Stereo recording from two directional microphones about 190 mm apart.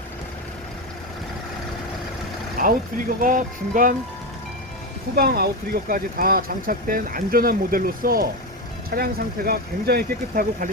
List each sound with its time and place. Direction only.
2.6 s vehicle: 40° right (ahead or behind)
3.2 s speech: 45° right (ahead or behind)
5.1 s speech: 55° right (ahead or behind)